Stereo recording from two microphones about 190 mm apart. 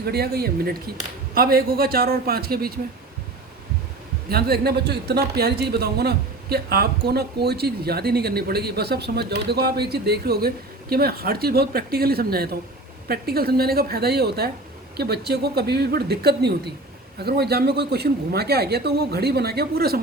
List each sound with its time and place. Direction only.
0.0 s a woman's voice: 55° right (ahead or behind)
4.3 s a woman's voice: 55° right (ahead or behind)